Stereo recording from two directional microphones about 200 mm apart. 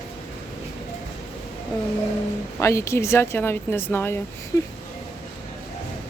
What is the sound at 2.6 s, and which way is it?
Speech, 15° left (ahead or behind).